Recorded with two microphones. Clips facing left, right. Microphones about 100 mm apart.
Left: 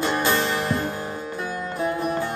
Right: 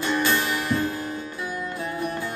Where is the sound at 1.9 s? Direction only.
45° left (ahead or behind).